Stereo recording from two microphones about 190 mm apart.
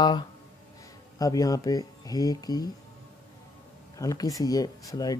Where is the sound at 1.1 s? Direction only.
20° left (ahead or behind).